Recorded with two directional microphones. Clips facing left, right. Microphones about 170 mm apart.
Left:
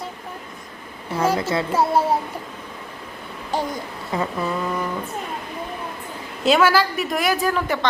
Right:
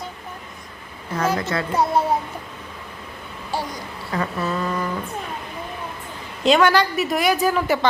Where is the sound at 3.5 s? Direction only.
20° left (ahead or behind).